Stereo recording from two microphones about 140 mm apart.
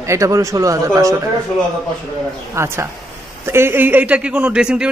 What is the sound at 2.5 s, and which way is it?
A man's voice, 20° right (ahead or behind).